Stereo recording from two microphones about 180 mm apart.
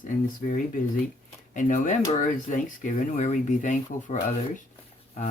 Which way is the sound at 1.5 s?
45° left (ahead or behind).